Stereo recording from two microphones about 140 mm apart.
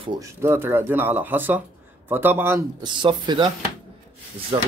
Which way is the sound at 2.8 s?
35° right (ahead or behind).